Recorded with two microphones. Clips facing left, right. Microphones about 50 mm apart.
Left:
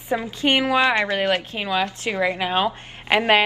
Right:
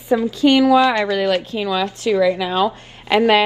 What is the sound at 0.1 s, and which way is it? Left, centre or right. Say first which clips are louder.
A woman's voice: right 6 dB; left.